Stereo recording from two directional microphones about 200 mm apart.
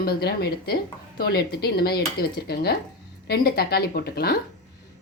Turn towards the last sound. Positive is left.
turn(degrees=50)  # may be behind; listen again after turning